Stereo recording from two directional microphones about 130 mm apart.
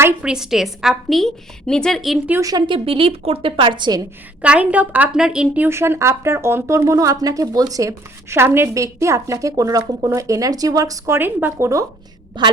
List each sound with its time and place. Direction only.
0.2 s a woman's voice: 5° right (ahead or behind)
2.4 s a woman's voice: 30° right (ahead or behind)
4.4 s a woman's voice: 10° right (ahead or behind)
5.6 s speech: 20° right (ahead or behind)
12.4 s a woman's voice: 35° right (ahead or behind)